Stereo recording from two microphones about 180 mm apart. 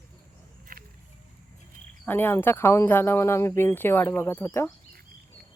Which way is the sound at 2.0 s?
10° left (ahead or behind).